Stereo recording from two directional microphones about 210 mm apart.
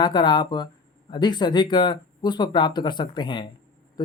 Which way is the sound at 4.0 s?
20° left (ahead or behind).